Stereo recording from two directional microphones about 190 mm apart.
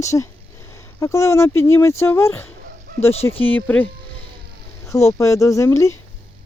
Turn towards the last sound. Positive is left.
turn(degrees=15)  # may be behind; listen again after turning